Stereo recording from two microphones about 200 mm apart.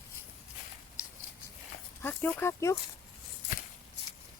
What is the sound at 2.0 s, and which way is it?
Speech, 10° left (ahead or behind).